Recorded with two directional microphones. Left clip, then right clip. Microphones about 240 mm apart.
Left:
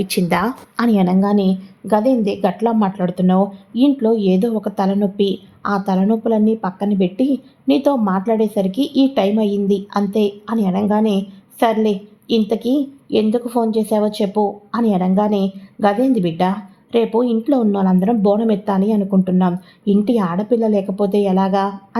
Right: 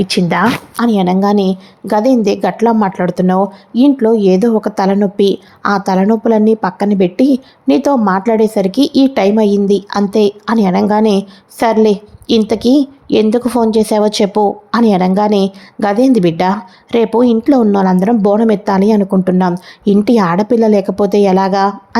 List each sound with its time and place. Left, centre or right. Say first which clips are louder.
0.0 s a woman's voice: right 6 dB; centre; by 21.8 s right